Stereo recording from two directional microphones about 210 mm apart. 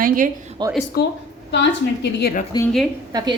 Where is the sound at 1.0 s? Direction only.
45° left (ahead or behind).